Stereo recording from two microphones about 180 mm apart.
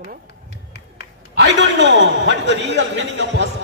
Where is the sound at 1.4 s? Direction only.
75° right (ahead or behind).